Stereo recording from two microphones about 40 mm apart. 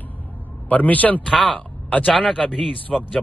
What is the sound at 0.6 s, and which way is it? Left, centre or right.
Speech, left.